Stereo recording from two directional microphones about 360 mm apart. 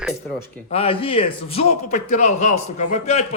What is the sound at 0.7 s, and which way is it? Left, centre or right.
A man's voice, centre.